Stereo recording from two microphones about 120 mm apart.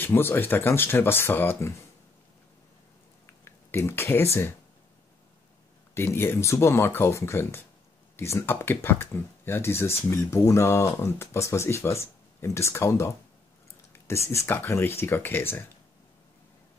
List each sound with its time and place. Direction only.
0.0 s speech: 20° left (ahead or behind)
3.4 s speech: 20° left (ahead or behind)
5.9 s speech: 20° left (ahead or behind)